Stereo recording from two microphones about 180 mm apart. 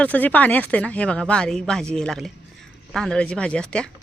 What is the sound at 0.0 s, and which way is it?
Speech, 10° left (ahead or behind).